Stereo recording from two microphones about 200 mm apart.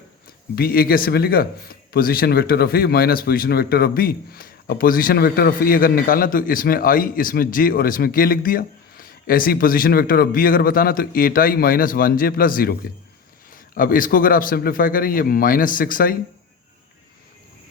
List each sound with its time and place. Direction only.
0.5 s speech: 50° left (ahead or behind)